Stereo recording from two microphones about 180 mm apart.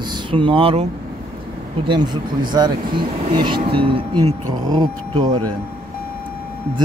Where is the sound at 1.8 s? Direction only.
25° right (ahead or behind).